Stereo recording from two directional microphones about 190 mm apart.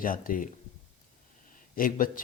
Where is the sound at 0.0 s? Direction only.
45° left (ahead or behind).